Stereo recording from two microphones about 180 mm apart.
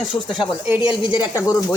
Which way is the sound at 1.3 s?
20° left (ahead or behind).